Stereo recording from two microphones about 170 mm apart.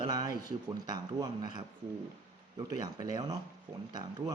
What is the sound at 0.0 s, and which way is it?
Speech, 25° right (ahead or behind).